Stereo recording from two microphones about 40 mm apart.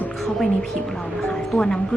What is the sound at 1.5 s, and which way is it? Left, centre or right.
Speech, centre.